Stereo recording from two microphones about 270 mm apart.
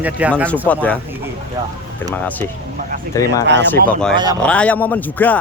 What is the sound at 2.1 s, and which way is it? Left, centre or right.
Speech, centre.